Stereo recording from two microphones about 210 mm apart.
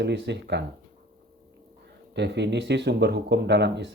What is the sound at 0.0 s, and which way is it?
Speech, 55° right (ahead or behind).